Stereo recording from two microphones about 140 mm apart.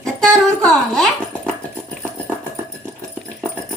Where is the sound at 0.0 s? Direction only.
5° left (ahead or behind).